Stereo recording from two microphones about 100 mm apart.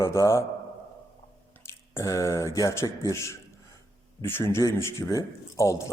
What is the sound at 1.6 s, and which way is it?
A man's voice, 30° left (ahead or behind).